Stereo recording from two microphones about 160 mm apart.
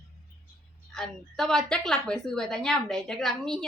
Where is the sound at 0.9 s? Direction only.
Centre (ahead or behind).